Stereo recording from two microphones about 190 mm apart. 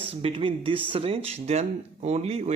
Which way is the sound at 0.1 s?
30° right (ahead or behind).